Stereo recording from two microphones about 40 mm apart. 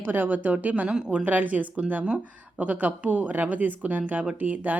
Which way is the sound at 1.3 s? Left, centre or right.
Right.